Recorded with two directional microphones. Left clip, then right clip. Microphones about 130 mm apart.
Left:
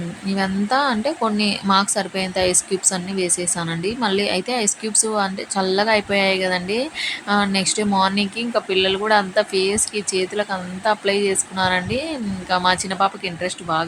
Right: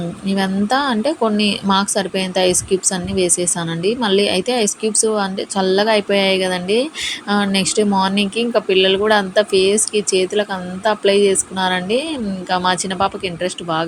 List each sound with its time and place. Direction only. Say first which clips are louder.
0.3 s speech: right 3 dB; 15° right (ahead or behind)